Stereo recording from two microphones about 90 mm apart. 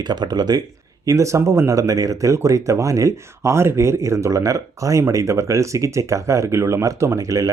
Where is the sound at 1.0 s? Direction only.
35° right (ahead or behind).